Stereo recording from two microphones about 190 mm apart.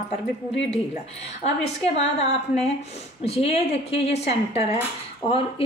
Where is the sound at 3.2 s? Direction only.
30° left (ahead or behind).